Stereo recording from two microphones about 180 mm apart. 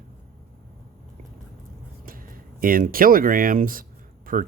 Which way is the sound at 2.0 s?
50° right (ahead or behind).